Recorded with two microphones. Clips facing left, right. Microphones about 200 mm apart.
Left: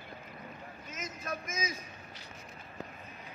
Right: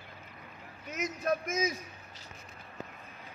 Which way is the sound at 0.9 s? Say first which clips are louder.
Right 9 dB; 60° right (ahead or behind).